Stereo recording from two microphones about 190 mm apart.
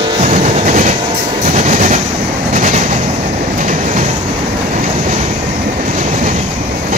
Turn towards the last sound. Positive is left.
turn(degrees=-40)  # may be behind; listen again after turning